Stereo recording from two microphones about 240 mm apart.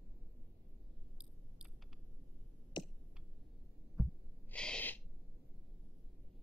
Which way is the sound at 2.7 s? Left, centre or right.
Centre.